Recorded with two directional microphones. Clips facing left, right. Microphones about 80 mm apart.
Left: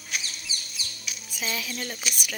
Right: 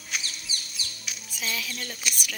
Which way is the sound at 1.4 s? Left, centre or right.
Left.